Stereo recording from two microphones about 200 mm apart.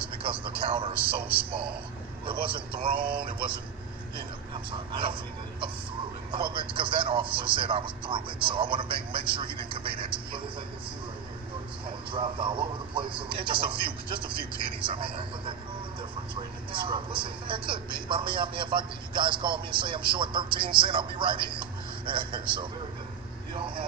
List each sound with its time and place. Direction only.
0.2 s a man's voice: 25° right (ahead or behind)
3.0 s speech: 50° right (ahead or behind)
4.9 s speech: 25° right (ahead or behind)
12.1 s speech: 25° right (ahead or behind)